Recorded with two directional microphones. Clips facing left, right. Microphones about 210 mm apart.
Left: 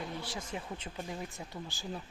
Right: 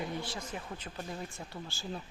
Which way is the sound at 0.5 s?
20° left (ahead or behind).